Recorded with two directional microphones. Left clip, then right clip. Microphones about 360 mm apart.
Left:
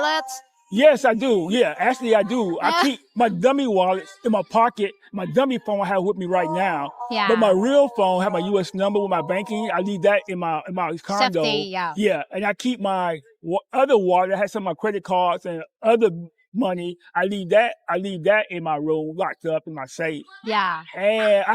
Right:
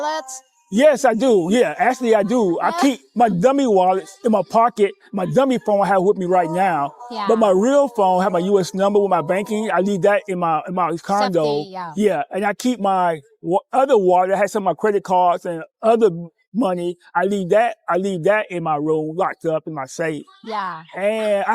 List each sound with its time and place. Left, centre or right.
0.0 s a sound: left
0.7 s speech: right; by 11.2 s centre
11.4 s speech: left
11.9 s speech: right
16.6 s speech: right
19.1 s speech: centre
20.5 s speech: left
20.9 s speech: right